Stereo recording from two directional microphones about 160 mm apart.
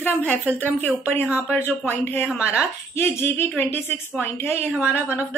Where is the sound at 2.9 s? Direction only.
15° left (ahead or behind).